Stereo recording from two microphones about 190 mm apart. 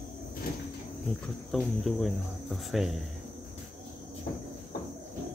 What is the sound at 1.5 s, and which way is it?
Speech, centre (ahead or behind).